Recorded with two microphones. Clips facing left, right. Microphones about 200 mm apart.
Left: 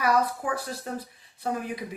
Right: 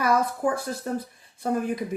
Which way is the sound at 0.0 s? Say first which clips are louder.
Right 2 dB; 45° right (ahead or behind).